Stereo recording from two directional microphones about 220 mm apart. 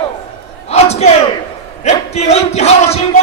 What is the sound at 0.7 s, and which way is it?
Battle cry, 30° left (ahead or behind).